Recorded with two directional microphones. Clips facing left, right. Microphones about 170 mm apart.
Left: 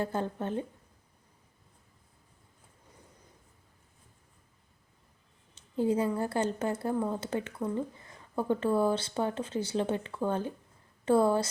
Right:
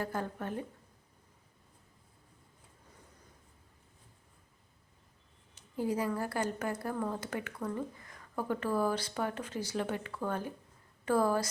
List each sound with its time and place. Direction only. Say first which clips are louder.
0.0 s speech: left 4 dB; 25° left (ahead or behind)
5.5 s a woman's voice: left 5 dB; 25° left (ahead or behind)